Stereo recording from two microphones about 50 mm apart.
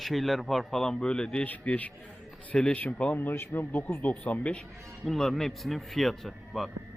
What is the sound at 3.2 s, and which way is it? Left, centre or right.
Speech, left.